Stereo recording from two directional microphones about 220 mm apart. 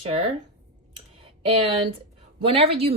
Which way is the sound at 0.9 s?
25° right (ahead or behind).